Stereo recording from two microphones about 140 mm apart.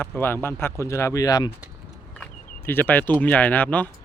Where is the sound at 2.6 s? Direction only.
15° left (ahead or behind).